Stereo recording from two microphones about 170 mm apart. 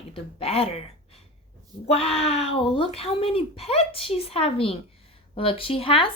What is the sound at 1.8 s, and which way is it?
Speech, 35° left (ahead or behind).